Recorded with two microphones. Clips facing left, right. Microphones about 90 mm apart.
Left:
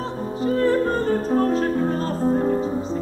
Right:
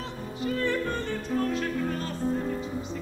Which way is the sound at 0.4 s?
35° left (ahead or behind).